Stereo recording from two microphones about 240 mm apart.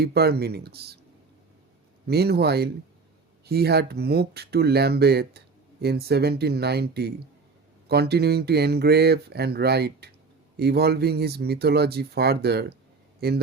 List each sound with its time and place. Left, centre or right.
0.0 s speech: right
2.0 s a man's voice: right